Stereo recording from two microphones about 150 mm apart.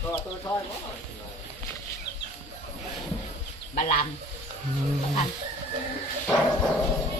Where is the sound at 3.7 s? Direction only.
65° left (ahead or behind).